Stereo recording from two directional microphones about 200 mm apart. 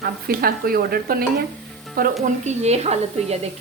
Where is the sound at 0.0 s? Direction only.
50° right (ahead or behind).